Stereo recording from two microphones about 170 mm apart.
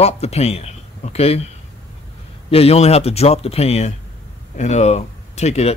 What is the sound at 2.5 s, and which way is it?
Speech, 35° left (ahead or behind).